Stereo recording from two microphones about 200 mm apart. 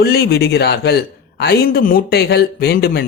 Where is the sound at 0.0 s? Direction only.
50° left (ahead or behind).